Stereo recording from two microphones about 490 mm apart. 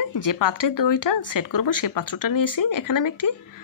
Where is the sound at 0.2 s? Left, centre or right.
Left.